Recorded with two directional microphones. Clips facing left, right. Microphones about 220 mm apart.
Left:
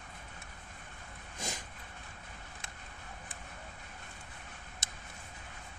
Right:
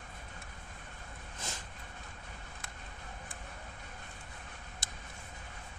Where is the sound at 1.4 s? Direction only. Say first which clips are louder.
Left 4 dB; 15° left (ahead or behind).